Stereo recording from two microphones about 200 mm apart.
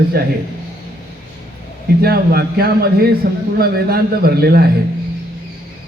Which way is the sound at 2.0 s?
50° right (ahead or behind).